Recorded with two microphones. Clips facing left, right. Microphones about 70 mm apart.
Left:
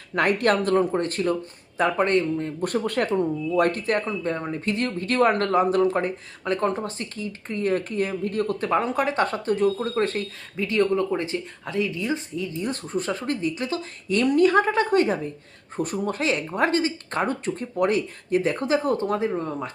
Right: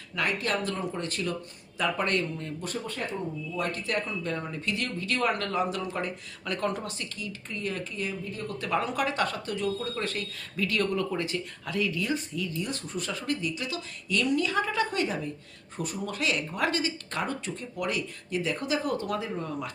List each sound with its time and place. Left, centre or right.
0.1 s speech: left
2.6 s speech: left
3.5 s speech: left
8.6 s speech: left